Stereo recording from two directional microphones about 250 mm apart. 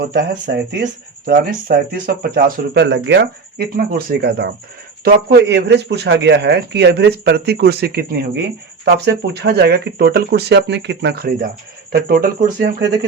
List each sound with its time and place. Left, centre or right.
0.0 s a man's voice: right